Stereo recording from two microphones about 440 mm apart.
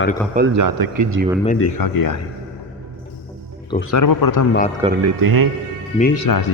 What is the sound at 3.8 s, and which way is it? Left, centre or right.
Speech, left.